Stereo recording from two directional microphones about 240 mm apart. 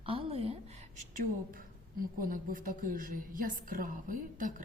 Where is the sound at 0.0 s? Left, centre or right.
Right.